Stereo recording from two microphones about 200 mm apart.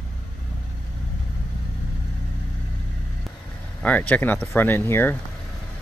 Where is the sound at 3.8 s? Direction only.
5° left (ahead or behind).